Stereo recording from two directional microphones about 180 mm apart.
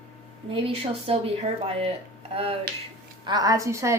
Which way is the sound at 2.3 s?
35° right (ahead or behind).